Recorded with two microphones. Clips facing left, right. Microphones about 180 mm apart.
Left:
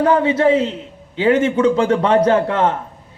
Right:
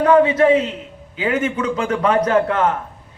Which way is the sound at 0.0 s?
30° left (ahead or behind).